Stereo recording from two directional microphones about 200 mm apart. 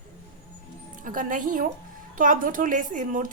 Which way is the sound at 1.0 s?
40° right (ahead or behind).